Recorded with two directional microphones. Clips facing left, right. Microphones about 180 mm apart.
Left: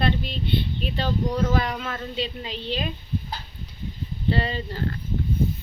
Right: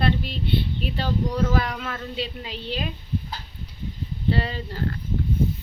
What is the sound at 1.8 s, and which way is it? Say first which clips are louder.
A woman's voice: left 1 dB; 5° right (ahead or behind).